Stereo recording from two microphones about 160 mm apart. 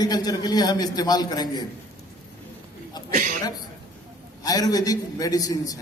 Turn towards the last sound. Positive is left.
turn(degrees=20)  # may be behind; listen again after turning